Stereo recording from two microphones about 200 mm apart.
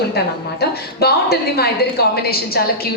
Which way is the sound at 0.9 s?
50° left (ahead or behind).